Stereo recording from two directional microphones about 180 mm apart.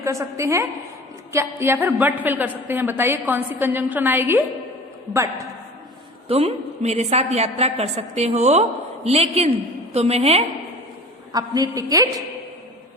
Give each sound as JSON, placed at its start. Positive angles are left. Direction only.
{"t": 0.0, "sound": "a woman's voice", "side_deg": -15}
{"t": 6.2, "sound": "a woman's voice", "side_deg": -35}
{"t": 11.3, "sound": "a woman's voice", "side_deg": -20}